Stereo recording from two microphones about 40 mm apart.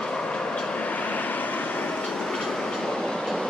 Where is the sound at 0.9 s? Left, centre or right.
Left.